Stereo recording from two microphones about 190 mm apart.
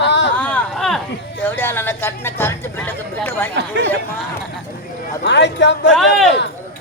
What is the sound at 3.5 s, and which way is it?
Speech, 65° right (ahead or behind).